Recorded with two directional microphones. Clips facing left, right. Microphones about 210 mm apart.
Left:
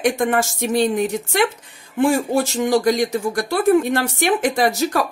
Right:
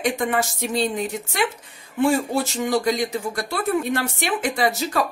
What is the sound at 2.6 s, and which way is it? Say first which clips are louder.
Speech: left 5 dB; 45° left (ahead or behind).